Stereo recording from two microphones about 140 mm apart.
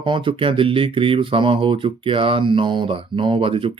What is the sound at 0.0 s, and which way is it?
Speech, 35° right (ahead or behind).